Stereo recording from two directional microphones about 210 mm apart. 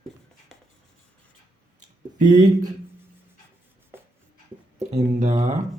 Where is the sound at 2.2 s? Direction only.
20° right (ahead or behind).